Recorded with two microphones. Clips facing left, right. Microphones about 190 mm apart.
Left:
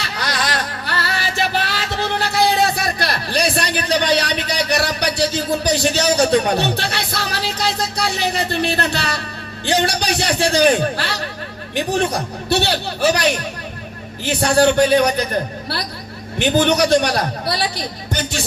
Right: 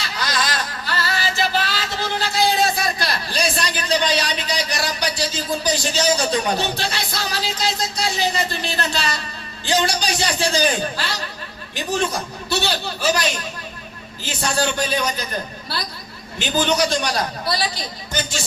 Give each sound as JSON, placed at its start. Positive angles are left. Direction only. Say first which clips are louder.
{"t": 0.0, "sound": "music", "louder": "left 1 dB", "side_deg": 60}
{"t": 9.6, "sound": "a man's voice", "louder": "left 2 dB", "side_deg": 60}